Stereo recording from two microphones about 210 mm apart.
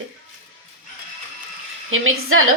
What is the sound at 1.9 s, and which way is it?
Dishes, 75° right (ahead or behind).